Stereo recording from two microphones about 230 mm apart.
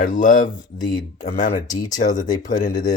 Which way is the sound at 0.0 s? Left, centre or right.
Left.